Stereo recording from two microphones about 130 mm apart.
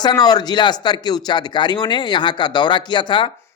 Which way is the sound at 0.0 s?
30° left (ahead or behind).